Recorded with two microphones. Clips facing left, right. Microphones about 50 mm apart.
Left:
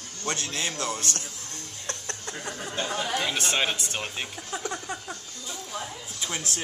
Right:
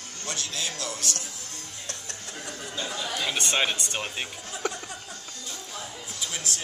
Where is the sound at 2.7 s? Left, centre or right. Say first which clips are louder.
Left 3 dB; left.